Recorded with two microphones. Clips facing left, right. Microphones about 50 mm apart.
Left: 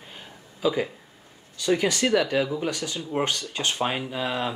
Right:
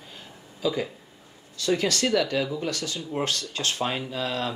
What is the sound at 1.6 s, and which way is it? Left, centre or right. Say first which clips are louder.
Speech: left 2 dB; centre.